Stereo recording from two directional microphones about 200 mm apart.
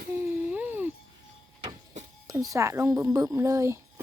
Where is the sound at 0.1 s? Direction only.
10° right (ahead or behind).